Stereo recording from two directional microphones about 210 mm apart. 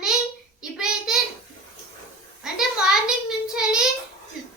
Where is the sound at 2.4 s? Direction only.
Centre (ahead or behind).